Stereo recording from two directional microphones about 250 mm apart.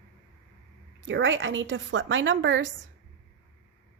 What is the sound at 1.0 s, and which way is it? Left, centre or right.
A woman's voice, right.